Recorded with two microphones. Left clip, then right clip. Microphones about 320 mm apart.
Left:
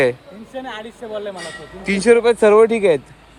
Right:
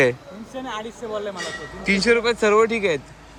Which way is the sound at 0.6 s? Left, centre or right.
Centre.